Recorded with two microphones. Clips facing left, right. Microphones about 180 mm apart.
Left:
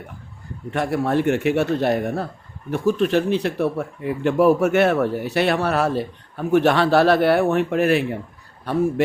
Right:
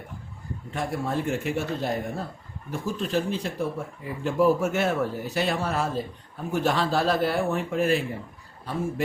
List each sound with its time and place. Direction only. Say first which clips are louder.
0.7 s speech: left 8 dB; 70° left (ahead or behind)